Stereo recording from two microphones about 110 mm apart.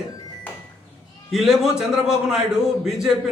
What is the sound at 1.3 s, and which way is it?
Speech, centre (ahead or behind).